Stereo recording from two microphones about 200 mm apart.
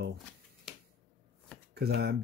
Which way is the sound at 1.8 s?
55° right (ahead or behind).